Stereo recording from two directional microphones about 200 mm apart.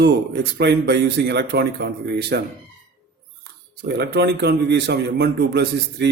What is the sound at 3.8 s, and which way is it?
Speech, 55° right (ahead or behind).